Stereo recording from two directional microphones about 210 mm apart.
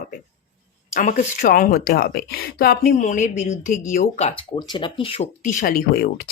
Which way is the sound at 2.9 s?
35° left (ahead or behind).